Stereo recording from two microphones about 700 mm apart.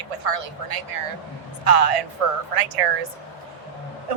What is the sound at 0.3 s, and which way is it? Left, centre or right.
A man's voice, right.